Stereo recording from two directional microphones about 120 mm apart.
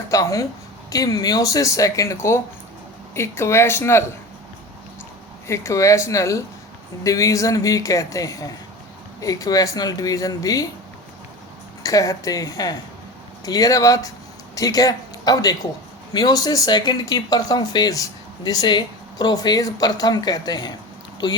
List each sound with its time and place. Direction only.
0.1 s a man's voice: 30° left (ahead or behind)
5.5 s a man's voice: 25° left (ahead or behind)
11.8 s a man's voice: 30° left (ahead or behind)